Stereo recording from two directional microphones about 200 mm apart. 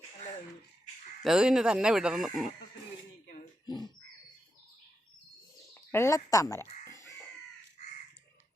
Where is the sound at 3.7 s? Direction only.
20° left (ahead or behind).